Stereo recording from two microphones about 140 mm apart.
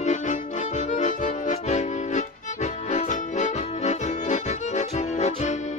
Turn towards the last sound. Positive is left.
turn(degrees=55)  # may be behind; listen again after turning